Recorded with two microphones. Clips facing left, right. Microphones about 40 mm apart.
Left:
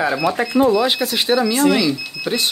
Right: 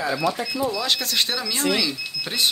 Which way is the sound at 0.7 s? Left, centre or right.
Centre.